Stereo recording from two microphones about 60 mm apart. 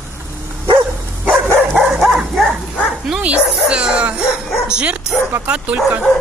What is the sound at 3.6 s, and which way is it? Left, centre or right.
Music, centre.